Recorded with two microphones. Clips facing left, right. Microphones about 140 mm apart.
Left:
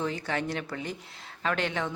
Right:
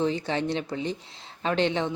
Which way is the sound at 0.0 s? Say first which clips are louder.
Right 5 dB; 25° right (ahead or behind).